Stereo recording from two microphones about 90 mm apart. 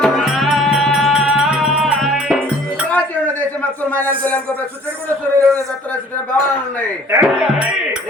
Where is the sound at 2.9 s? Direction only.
15° left (ahead or behind).